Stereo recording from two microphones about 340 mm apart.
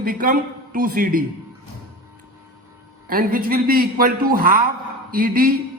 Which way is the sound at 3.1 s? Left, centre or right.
Right.